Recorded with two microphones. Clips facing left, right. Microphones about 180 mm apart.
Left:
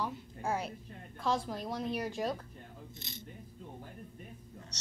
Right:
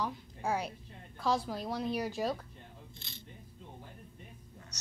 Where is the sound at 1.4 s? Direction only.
5° right (ahead or behind).